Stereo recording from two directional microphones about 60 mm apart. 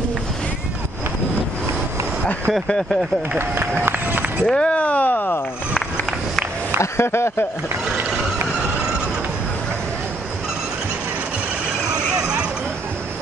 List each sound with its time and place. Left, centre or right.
3.3 s speech: right
4.5 s speech: centre
6.8 s speech: left